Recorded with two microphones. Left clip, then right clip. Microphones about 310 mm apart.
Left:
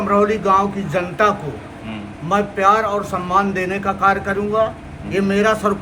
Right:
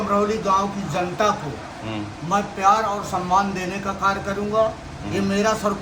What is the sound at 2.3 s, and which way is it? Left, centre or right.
A man's voice, centre.